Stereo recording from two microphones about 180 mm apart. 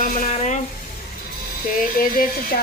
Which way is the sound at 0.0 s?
40° left (ahead or behind).